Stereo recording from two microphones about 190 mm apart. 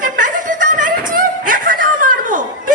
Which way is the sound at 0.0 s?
45° right (ahead or behind).